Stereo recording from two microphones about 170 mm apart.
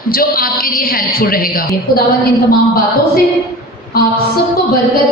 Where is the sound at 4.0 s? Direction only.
65° left (ahead or behind).